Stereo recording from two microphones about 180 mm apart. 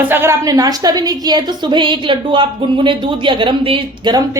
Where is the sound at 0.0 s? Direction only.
10° right (ahead or behind).